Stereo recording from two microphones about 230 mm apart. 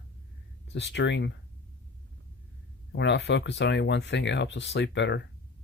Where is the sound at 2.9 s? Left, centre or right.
Left.